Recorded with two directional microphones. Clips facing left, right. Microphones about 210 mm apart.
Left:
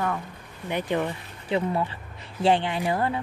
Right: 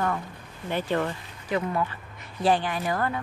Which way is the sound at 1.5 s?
30° left (ahead or behind).